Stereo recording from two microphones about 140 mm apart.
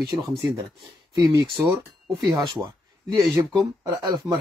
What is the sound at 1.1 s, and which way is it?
Speech, 30° right (ahead or behind).